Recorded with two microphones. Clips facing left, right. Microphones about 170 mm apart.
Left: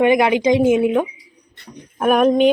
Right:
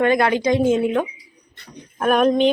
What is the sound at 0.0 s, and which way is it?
Speech, 15° left (ahead or behind).